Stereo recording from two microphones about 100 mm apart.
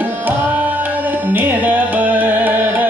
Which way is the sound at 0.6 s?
15° right (ahead or behind).